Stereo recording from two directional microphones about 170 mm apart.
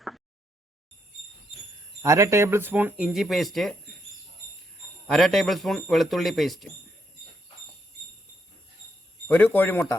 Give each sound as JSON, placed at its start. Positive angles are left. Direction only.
{"t": 2.0, "sound": "speech", "side_deg": -20}
{"t": 5.0, "sound": "speech", "side_deg": 0}
{"t": 9.2, "sound": "a man's voice", "side_deg": 10}